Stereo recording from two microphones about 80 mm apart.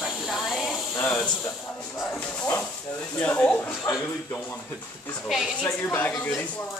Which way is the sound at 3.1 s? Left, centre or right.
Left.